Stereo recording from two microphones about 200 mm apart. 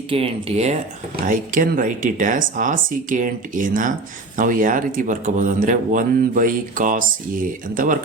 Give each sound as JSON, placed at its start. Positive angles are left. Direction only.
{"t": 0.1, "sound": "speech", "side_deg": -30}
{"t": 1.3, "sound": "speech", "side_deg": -45}